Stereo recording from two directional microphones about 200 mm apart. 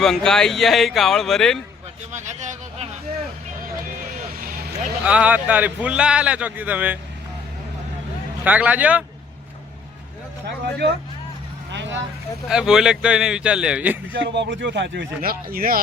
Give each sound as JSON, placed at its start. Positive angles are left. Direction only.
{"t": 0.0, "sound": "speech", "side_deg": 0}
{"t": 2.1, "sound": "a sound", "side_deg": -35}
{"t": 4.0, "sound": "vehicle", "side_deg": -45}
{"t": 5.0, "sound": "a man's voice", "side_deg": -5}
{"t": 8.4, "sound": "a man's voice", "side_deg": -5}
{"t": 10.4, "sound": "speech", "side_deg": -55}
{"t": 12.5, "sound": "speech", "side_deg": -5}
{"t": 14.1, "sound": "speech", "side_deg": -60}